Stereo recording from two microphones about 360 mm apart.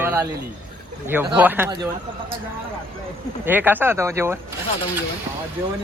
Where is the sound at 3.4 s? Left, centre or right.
Centre.